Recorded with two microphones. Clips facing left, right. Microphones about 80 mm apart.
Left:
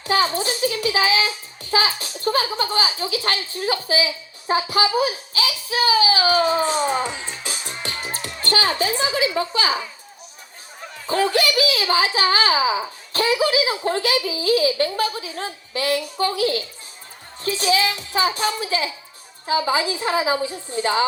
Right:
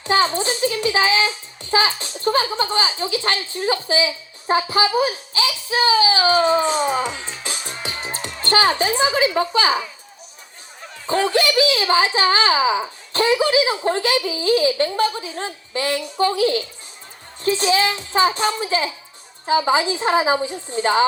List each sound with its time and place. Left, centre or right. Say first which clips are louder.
0.0 s a sound: right 2 dB; right
1.7 s a woman's voice: right 2 dB; right
7.1 s music: right 1 dB; centre
7.7 s music: left 1 dB; centre
11.0 s a woman's voice: right 1 dB; right